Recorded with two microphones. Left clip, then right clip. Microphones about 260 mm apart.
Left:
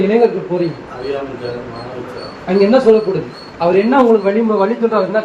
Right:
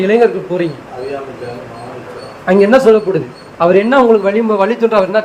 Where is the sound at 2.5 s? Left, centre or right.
Right.